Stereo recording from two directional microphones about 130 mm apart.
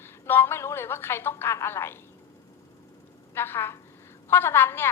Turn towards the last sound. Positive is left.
turn(degrees=20)  # may be behind; listen again after turning